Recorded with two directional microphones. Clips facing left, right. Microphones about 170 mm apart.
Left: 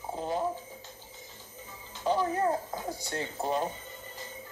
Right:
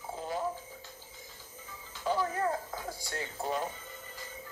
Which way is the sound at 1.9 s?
25° left (ahead or behind).